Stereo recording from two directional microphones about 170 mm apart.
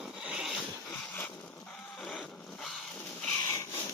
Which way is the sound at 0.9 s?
10° left (ahead or behind).